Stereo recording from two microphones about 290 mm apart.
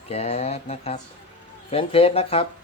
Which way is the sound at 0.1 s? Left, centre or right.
Left.